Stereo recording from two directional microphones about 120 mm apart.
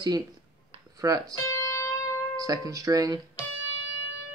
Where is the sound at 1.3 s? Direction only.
25° left (ahead or behind).